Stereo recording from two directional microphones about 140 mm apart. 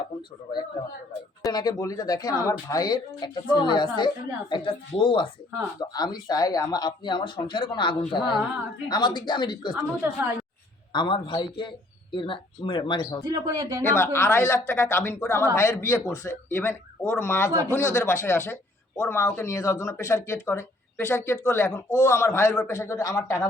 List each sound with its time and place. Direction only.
1.5 s speech: 30° left (ahead or behind)
9.7 s a woman's voice: 15° right (ahead or behind)
10.9 s speech: 35° left (ahead or behind)
13.2 s speech: 25° right (ahead or behind)
13.8 s speech: 15° left (ahead or behind)